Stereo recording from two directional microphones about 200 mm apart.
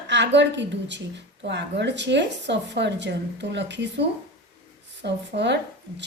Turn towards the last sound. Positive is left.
turn(degrees=-60)  # may be behind; listen again after turning